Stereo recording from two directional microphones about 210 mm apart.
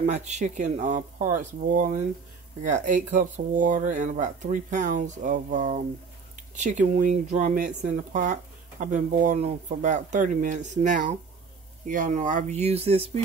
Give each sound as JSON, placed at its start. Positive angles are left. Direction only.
{"t": 0.0, "sound": "speech", "side_deg": -35}